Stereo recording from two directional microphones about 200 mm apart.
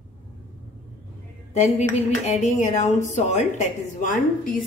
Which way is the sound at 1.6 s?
35° left (ahead or behind).